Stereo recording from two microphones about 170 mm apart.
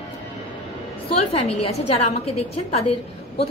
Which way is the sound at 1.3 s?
35° left (ahead or behind).